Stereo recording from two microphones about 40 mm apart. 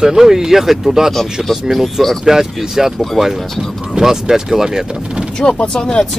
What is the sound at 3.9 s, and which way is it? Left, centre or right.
Speech, centre.